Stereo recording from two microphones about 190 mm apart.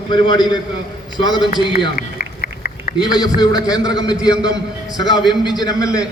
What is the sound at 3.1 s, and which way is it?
A man's voice, 20° left (ahead or behind).